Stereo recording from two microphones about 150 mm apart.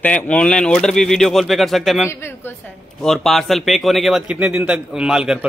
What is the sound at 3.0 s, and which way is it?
Speech, centre (ahead or behind).